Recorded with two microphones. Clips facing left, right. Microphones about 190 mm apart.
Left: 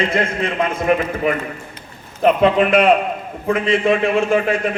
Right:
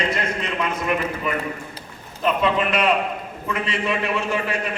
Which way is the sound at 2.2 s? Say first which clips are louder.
Left 7 dB; 50° left (ahead or behind).